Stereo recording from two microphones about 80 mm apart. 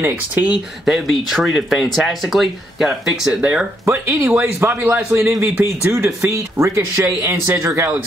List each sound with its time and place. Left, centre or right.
0.8 s speech: centre
3.8 s speech: right